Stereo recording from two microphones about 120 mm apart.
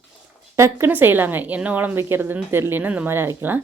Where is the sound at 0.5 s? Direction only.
20° right (ahead or behind).